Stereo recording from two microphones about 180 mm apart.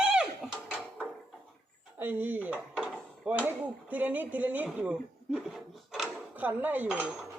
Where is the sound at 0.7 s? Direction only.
5° right (ahead or behind).